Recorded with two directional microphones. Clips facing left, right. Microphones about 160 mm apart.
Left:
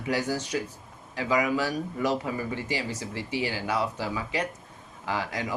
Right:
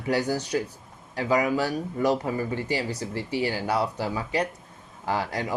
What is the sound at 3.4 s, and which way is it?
Speech, 35° right (ahead or behind).